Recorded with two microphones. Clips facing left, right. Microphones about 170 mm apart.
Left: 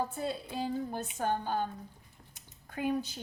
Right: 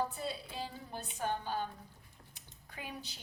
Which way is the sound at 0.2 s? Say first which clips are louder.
Left 6 dB; 50° left (ahead or behind).